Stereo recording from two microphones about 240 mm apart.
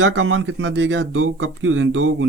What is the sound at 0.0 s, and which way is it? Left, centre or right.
Speech, right.